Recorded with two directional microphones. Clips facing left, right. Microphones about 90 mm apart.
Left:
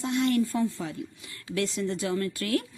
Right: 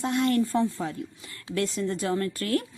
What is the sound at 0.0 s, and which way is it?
Speech, 45° right (ahead or behind).